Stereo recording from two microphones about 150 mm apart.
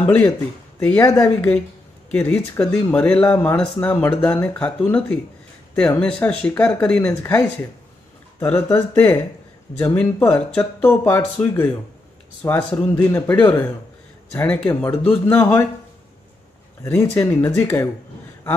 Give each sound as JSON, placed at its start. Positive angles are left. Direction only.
{"t": 0.7, "sound": "speech", "side_deg": 10}
{"t": 16.8, "sound": "speech", "side_deg": 15}